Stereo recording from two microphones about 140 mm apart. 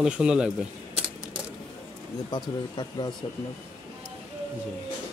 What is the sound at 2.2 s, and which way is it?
Speech, 30° left (ahead or behind).